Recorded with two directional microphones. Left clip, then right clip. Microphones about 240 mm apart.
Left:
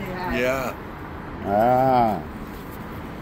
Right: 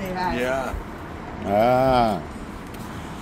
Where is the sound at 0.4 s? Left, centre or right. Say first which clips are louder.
Left 1 dB; left.